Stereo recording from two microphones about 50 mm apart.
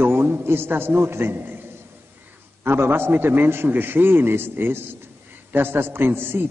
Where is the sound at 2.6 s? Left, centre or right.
Right.